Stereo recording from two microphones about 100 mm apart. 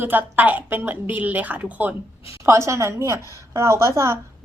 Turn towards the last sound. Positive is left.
turn(degrees=-25)  # may be behind; listen again after turning